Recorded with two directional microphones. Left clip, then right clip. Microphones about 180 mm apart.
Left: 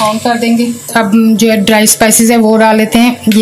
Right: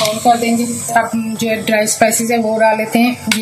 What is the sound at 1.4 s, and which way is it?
Speech, 65° left (ahead or behind).